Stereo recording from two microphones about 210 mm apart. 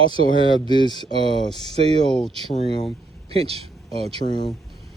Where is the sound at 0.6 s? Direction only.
20° left (ahead or behind).